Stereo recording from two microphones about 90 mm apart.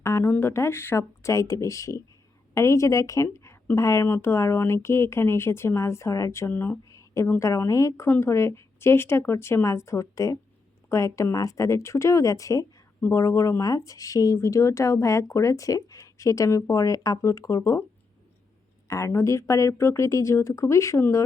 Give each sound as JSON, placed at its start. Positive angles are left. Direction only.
{"t": 0.0, "sound": "speech", "side_deg": 30}
{"t": 6.5, "sound": "a sound", "side_deg": 25}
{"t": 7.3, "sound": "speech", "side_deg": 35}
{"t": 18.9, "sound": "speech", "side_deg": 35}